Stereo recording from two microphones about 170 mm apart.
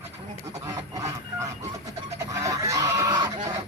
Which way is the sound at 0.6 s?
20° right (ahead or behind).